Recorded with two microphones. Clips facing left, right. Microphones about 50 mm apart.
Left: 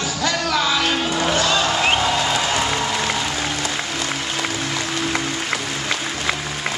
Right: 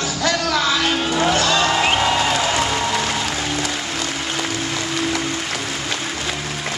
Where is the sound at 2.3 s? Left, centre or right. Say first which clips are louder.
Right 1 dB; centre.